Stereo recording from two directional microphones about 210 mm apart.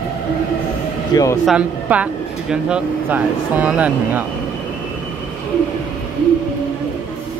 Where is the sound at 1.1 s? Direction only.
15° left (ahead or behind).